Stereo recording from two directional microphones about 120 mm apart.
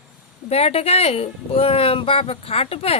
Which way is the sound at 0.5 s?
55° left (ahead or behind).